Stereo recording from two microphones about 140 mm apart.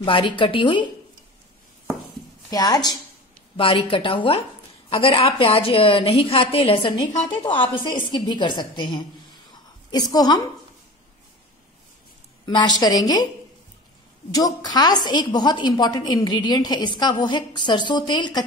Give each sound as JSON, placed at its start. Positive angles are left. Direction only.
{"t": 0.0, "sound": "a woman's voice", "side_deg": 35}
{"t": 2.5, "sound": "a woman's voice", "side_deg": 30}
{"t": 3.5, "sound": "a woman's voice", "side_deg": 40}
{"t": 12.4, "sound": "a woman's voice", "side_deg": 30}
{"t": 14.3, "sound": "a woman's voice", "side_deg": 30}